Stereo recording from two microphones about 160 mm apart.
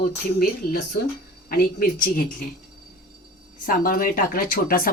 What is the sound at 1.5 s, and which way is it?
Speech, 65° left (ahead or behind).